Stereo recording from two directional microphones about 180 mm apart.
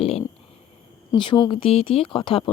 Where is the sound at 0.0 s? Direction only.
35° left (ahead or behind).